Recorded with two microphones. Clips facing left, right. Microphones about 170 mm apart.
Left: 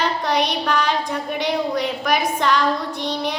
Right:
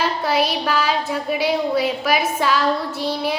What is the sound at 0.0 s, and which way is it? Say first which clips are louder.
Speech: right 1 dB; 5° right (ahead or behind).